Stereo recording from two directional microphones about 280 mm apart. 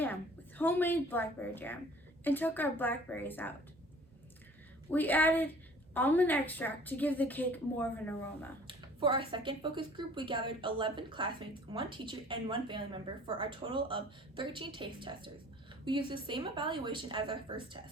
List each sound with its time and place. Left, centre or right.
0.0 s a woman's voice: centre
4.9 s a woman's voice: centre
8.6 s a woman's voice: centre